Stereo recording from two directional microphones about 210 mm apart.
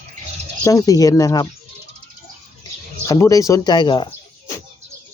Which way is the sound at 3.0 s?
15° left (ahead or behind).